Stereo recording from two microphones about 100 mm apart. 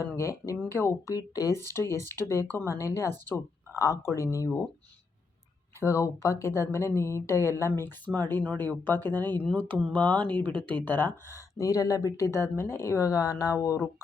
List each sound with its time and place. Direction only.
0.0 s speech: 30° left (ahead or behind)
1.1 s speech: 35° left (ahead or behind)
3.8 s speech: 35° left (ahead or behind)
5.8 s a woman's voice: 30° left (ahead or behind)
11.3 s speech: 30° left (ahead or behind)